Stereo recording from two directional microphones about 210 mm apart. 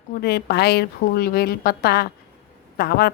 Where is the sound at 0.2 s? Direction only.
45° left (ahead or behind).